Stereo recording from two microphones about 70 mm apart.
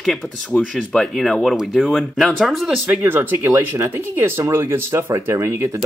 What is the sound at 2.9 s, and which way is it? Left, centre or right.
Speech, right.